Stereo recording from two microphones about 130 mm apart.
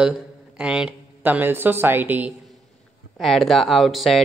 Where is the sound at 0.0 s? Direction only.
5° right (ahead or behind).